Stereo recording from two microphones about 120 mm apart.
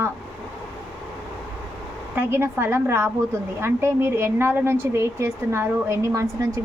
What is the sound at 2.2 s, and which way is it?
A woman's voice, 20° right (ahead or behind).